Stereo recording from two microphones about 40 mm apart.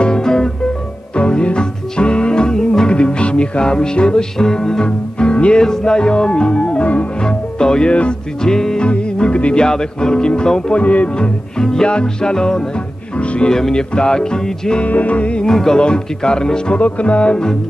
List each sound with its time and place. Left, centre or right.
0.0 s guitar: centre
1.1 s music: left
5.6 s music: centre; by 7.1 s left
7.2 s music: centre
9.6 s music: centre
10.8 s music: left; by 12.8 s centre
13.1 s music: left
13.5 s music: centre
14.8 s music: left
15.4 s music: centre
15.8 s music: left
16.7 s music: left